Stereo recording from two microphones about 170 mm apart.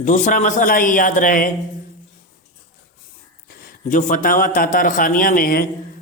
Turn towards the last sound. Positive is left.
turn(degrees=55)  # may be behind; listen again after turning